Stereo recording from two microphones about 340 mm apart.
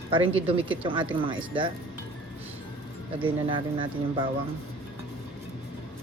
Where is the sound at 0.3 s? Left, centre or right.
Centre.